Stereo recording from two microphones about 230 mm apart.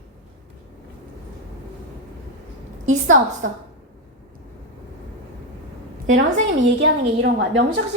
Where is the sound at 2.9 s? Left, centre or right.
Right.